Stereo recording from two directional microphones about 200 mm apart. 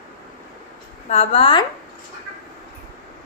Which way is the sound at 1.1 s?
30° left (ahead or behind).